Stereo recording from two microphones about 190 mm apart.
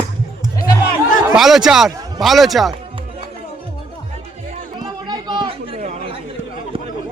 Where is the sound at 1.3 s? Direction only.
Centre (ahead or behind).